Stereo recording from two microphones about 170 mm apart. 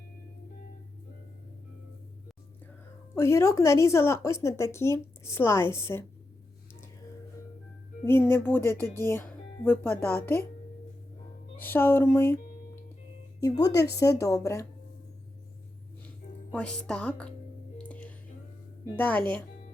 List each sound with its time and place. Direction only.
3.2 s a woman's voice: 15° left (ahead or behind)
8.0 s a woman's voice: 15° left (ahead or behind)
11.6 s a woman's voice: 10° left (ahead or behind)
13.4 s a woman's voice: 20° left (ahead or behind)
16.0 s speech: 5° left (ahead or behind)
17.8 s a sound: 10° left (ahead or behind)
18.9 s a woman's voice: 10° left (ahead or behind)